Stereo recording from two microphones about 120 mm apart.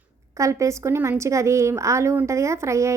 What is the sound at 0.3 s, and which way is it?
A woman's voice, 25° right (ahead or behind).